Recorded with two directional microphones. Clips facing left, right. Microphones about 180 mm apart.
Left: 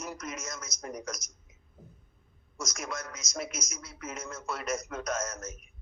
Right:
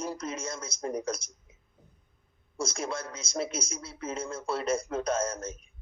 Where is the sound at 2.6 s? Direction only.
30° right (ahead or behind).